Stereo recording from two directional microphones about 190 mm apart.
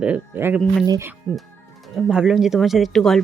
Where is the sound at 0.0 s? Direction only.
10° right (ahead or behind).